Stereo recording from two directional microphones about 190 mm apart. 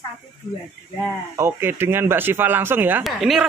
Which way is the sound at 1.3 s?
15° right (ahead or behind).